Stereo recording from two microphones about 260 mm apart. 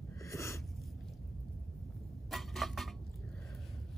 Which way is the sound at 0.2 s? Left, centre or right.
Centre.